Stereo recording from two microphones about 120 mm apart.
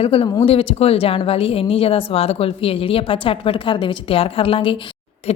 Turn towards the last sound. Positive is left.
turn(degrees=50)  # may be behind; listen again after turning